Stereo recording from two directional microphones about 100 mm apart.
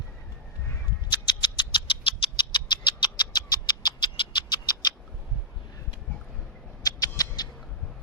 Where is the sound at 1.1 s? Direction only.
50° left (ahead or behind).